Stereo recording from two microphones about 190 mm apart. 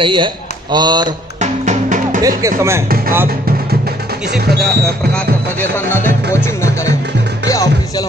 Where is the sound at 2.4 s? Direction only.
15° right (ahead or behind).